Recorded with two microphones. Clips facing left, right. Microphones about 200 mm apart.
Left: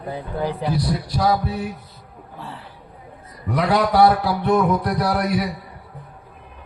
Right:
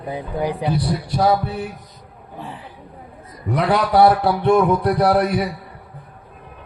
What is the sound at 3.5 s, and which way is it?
A man's voice, 30° right (ahead or behind).